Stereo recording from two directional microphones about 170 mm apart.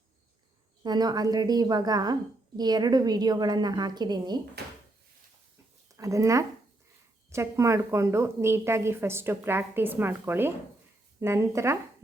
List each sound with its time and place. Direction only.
0.8 s a woman's voice: 25° right (ahead or behind)
5.9 s speech: 20° right (ahead or behind)